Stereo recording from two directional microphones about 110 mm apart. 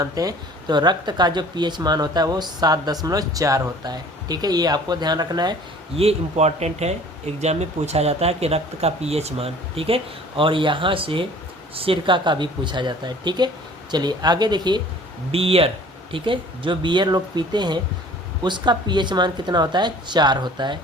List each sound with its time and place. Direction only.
0.0 s speech: 35° right (ahead or behind)
6.0 s speech: 75° right (ahead or behind); by 14.8 s 40° right (ahead or behind)
15.3 s speech: 60° right (ahead or behind)
16.1 s speech: 50° right (ahead or behind)